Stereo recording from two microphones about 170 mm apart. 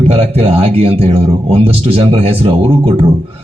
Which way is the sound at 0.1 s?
35° right (ahead or behind).